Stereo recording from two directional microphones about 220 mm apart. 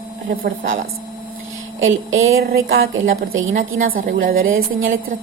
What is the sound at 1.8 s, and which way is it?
Speech, 60° right (ahead or behind).